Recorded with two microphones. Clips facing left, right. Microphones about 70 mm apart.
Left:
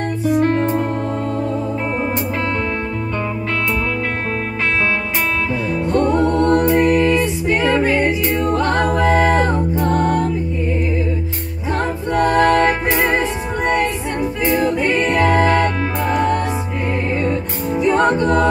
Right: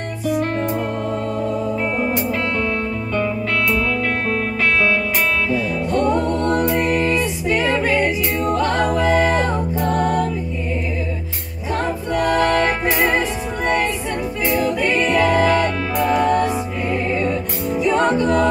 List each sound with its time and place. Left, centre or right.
5.5 s music: left
12.2 s music: left
14.4 s music: left
17.8 s music: left